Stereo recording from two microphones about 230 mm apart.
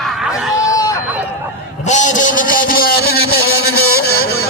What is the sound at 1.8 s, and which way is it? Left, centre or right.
Vehicle, left.